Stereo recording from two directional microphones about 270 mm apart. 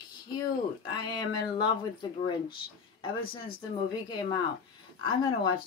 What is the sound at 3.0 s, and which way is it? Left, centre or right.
Speech, centre.